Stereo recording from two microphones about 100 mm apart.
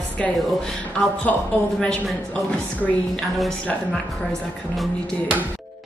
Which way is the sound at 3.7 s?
10° left (ahead or behind).